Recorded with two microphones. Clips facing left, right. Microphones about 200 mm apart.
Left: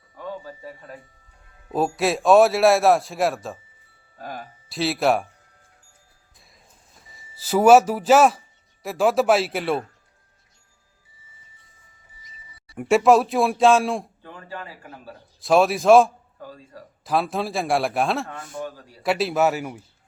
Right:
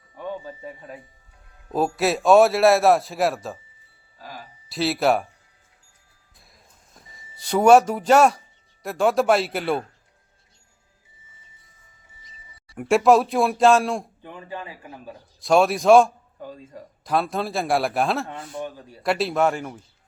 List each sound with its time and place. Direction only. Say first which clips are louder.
0.2 s speech: right 2 dB; 20° right (ahead or behind)
1.6 s speech: even; centre (ahead or behind)
4.2 s a sound: left 5 dB; 55° left (ahead or behind)
4.7 s speech: even; centre (ahead or behind)
6.9 s speech: right 3 dB; 5° left (ahead or behind)
12.7 s speech: even; centre (ahead or behind)
14.2 s a man's voice: right 2 dB; 15° right (ahead or behind)
15.4 s speech: even; centre (ahead or behind)
16.4 s speech: right 3 dB; 20° right (ahead or behind)
17.0 s speech: even; centre (ahead or behind)
18.6 s speech: even; 20° right (ahead or behind)
19.0 s speech: left 1 dB; centre (ahead or behind)